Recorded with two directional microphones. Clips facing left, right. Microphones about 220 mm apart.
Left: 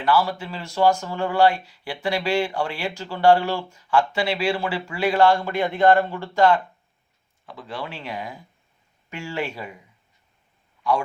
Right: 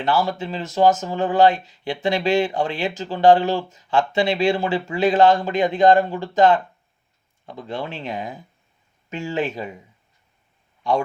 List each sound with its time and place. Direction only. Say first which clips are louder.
0.0 s speech: even; 20° right (ahead or behind)
7.6 s speech: right 4 dB; 25° right (ahead or behind)